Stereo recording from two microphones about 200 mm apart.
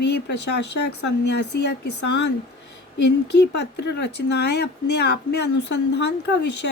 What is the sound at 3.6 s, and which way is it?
Speech, 55° left (ahead or behind).